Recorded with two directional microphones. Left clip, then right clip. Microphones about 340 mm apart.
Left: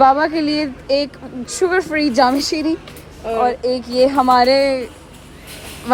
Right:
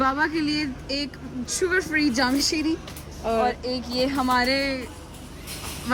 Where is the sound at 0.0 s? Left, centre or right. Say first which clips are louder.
Left 10 dB; centre.